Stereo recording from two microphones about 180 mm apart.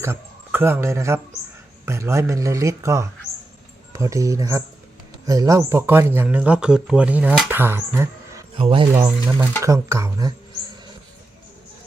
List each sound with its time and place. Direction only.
0.0 s a man's voice: 15° right (ahead or behind)
8.5 s speech: 30° right (ahead or behind)
8.9 s speech: 15° right (ahead or behind)